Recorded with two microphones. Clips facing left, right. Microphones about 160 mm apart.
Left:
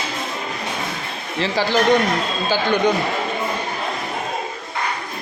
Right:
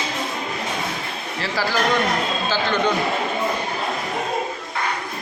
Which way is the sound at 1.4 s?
20° left (ahead or behind).